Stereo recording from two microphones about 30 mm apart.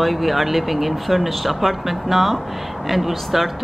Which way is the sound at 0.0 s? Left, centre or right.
Centre.